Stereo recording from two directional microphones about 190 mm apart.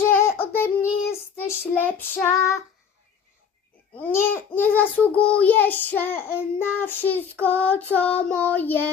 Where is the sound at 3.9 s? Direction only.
10° left (ahead or behind).